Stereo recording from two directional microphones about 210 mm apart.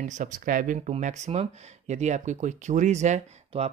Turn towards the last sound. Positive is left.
turn(degrees=-30)  # may be behind; listen again after turning